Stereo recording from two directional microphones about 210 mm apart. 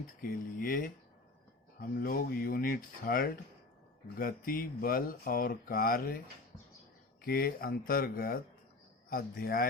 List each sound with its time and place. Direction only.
0.2 s speech: 40° left (ahead or behind)